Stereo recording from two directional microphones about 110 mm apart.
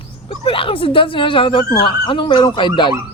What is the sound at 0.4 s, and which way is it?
Speech, 55° left (ahead or behind).